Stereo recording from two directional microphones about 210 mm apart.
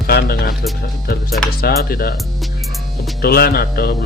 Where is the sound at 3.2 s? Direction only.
45° left (ahead or behind).